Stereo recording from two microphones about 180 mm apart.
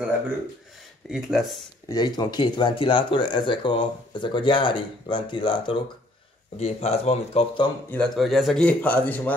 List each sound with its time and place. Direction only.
1.1 s speech: centre (ahead or behind)
1.9 s speech: 25° left (ahead or behind)
7.9 s speech: centre (ahead or behind)